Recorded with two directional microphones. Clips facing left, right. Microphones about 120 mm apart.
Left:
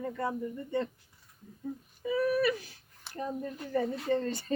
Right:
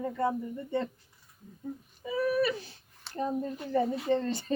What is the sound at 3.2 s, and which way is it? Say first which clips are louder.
Speech: right 4 dB; 25° right (ahead or behind).